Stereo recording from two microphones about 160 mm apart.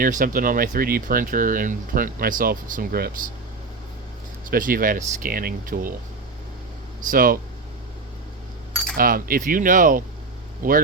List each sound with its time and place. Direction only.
0.0 s speech: 60° right (ahead or behind)
4.5 s speech: 60° right (ahead or behind)
7.0 s speech: 60° right (ahead or behind)
9.0 s speech: 65° right (ahead or behind)